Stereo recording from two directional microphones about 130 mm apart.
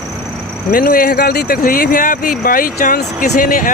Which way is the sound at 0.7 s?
90° left.